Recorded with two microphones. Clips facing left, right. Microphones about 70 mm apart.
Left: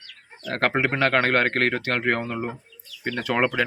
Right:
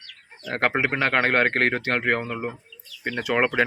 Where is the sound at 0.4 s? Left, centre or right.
Centre.